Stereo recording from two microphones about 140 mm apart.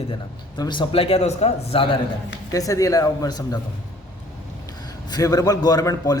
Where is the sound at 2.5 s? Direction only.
25° left (ahead or behind).